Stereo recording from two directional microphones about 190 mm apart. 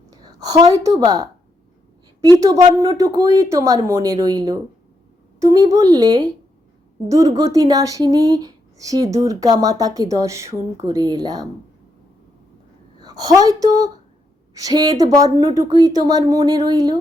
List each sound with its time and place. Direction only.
0.1 s speech: 20° right (ahead or behind)
13.0 s a woman's voice: 20° right (ahead or behind)